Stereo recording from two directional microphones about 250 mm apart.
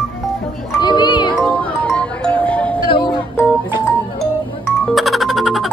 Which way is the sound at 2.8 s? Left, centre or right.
Centre.